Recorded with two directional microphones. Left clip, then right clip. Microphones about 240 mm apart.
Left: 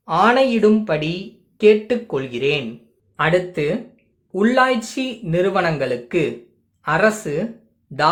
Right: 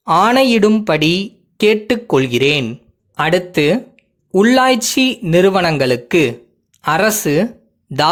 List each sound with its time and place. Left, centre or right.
0.0 s speech: right